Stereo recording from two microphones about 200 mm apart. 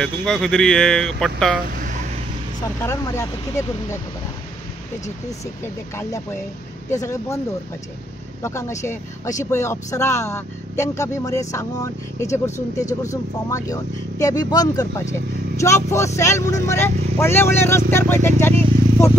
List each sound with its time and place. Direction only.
0.0 s speech: centre (ahead or behind)
1.8 s vehicle: 40° right (ahead or behind)
2.8 s speech: 15° left (ahead or behind)
6.9 s speech: 15° left (ahead or behind)
8.4 s speech: 15° left (ahead or behind)